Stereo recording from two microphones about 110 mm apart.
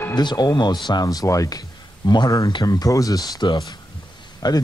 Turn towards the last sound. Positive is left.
turn(degrees=40)  # may be behind; listen again after turning